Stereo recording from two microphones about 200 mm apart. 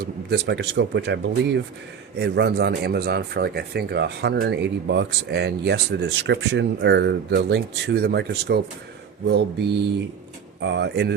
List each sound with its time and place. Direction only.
0.0 s a man's voice: 55° right (ahead or behind)
10.6 s a man's voice: 60° right (ahead or behind)